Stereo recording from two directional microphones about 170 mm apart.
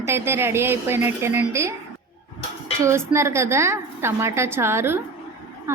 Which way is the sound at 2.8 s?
15° right (ahead or behind).